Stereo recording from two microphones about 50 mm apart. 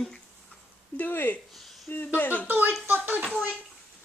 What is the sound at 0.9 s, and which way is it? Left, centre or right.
Speech, left.